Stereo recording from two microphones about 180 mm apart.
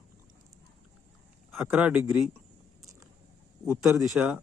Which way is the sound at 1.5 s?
5° right (ahead or behind).